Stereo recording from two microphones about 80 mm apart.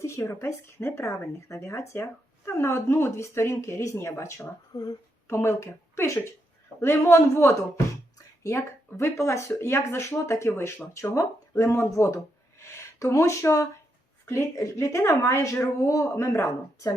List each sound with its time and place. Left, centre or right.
0.0 s speech: left
4.7 s speech: left
5.3 s speech: left